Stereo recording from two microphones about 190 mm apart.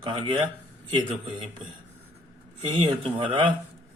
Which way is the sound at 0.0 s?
25° right (ahead or behind).